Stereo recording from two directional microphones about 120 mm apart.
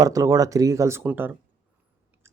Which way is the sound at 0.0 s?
30° right (ahead or behind).